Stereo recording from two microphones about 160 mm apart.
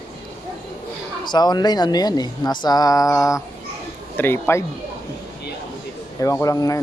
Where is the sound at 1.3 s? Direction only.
25° left (ahead or behind).